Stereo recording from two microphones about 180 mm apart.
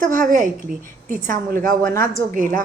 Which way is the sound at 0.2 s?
45° right (ahead or behind).